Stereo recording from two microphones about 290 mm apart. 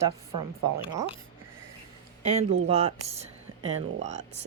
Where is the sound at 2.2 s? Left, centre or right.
Right.